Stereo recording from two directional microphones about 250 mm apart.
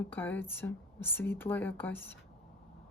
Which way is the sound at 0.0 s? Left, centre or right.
Centre.